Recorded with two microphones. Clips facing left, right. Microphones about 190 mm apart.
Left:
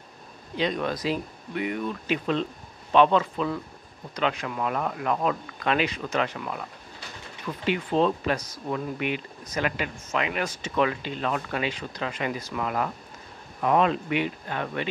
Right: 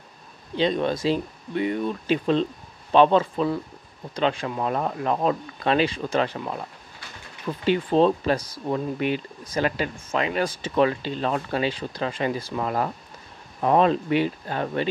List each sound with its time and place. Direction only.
0.6 s speech: 30° right (ahead or behind)